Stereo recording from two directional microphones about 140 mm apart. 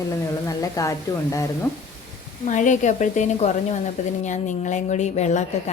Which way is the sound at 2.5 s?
65° left (ahead or behind).